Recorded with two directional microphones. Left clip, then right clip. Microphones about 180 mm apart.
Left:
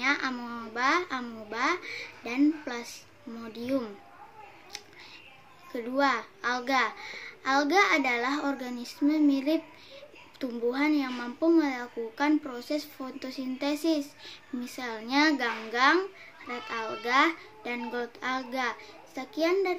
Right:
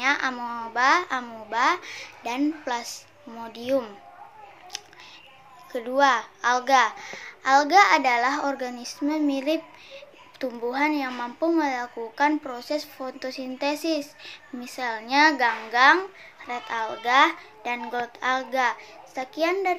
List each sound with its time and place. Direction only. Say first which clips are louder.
0.0 s a child's voice: right 5 dB; 15° left (ahead or behind)
5.7 s a child's voice: right 6 dB; 15° left (ahead or behind)